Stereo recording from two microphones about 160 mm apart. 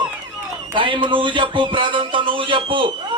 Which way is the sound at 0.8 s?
30° right (ahead or behind).